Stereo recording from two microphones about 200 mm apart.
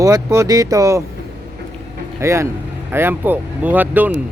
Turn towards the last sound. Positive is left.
turn(degrees=-10)  # may be behind; listen again after turning